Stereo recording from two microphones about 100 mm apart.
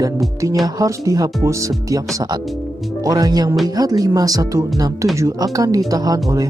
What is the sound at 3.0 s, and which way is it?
Speech, 35° right (ahead or behind).